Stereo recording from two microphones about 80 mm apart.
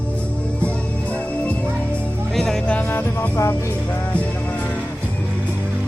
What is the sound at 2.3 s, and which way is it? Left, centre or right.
Music, centre.